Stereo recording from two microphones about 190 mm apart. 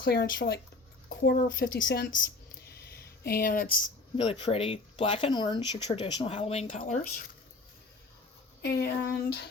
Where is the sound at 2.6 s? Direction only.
55° left (ahead or behind).